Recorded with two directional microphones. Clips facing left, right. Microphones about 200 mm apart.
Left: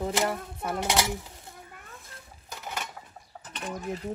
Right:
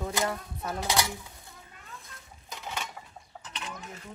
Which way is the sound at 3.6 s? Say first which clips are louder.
Left 6 dB; 50° left (ahead or behind).